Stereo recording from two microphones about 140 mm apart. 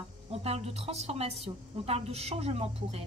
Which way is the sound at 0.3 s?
45° right (ahead or behind).